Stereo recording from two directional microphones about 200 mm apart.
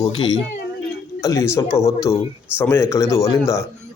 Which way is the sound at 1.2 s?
15° left (ahead or behind).